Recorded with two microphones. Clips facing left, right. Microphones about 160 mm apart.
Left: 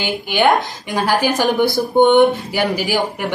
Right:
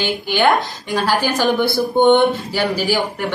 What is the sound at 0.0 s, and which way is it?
Speech, 15° left (ahead or behind).